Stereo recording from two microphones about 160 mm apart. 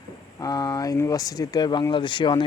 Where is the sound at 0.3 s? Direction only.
25° left (ahead or behind).